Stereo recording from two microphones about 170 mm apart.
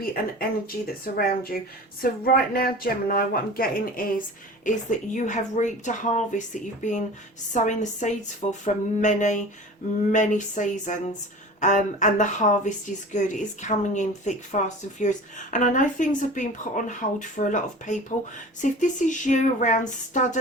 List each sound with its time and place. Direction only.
0.0 s speech: 60° left (ahead or behind)
4.6 s speech: 50° left (ahead or behind)